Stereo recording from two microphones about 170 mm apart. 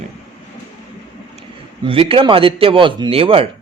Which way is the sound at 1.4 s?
35° right (ahead or behind).